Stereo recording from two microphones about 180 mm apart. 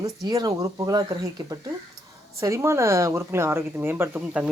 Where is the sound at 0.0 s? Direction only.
20° right (ahead or behind).